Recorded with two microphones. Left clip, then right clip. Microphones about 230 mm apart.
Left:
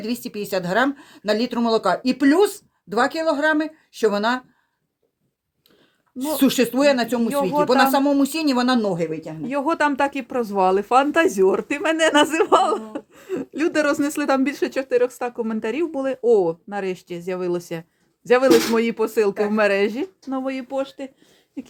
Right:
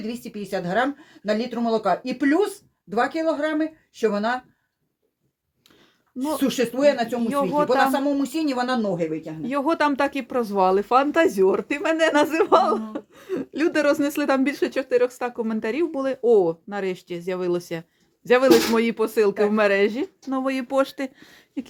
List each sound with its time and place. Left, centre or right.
0.0 s speech: left
6.4 s speech: left
7.3 s speech: centre
7.9 s speech: left
9.4 s speech: centre
20.4 s speech: centre
21.6 s a sound: centre